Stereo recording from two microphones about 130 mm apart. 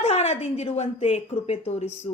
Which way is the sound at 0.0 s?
55° left (ahead or behind).